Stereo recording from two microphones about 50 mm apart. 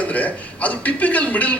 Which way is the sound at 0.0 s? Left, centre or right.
Left.